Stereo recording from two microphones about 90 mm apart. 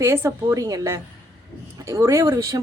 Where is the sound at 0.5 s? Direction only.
40° right (ahead or behind).